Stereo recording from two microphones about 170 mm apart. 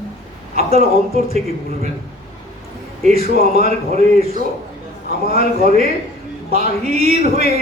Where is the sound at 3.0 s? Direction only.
40° right (ahead or behind).